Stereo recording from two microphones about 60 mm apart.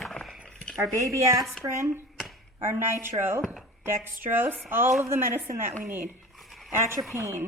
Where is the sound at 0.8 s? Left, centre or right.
Right.